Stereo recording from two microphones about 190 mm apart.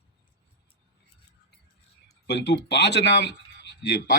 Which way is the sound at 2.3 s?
65° left (ahead or behind).